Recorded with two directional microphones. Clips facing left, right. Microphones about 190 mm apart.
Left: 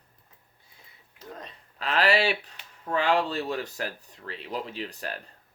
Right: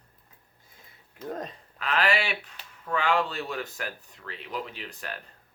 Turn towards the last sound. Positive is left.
turn(degrees=35)  # may be behind; listen again after turning